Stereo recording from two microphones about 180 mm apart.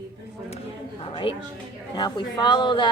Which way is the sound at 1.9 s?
25° left (ahead or behind).